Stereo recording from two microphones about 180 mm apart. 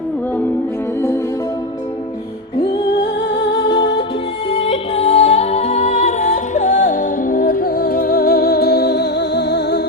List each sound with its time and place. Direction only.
4.4 s music: 35° left (ahead or behind); by 9.8 s 70° left (ahead or behind)